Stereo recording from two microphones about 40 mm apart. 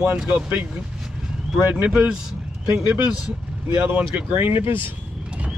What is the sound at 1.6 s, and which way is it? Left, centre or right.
Speech, right.